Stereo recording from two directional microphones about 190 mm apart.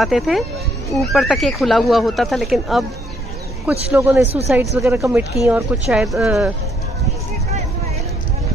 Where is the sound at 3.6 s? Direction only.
10° right (ahead or behind).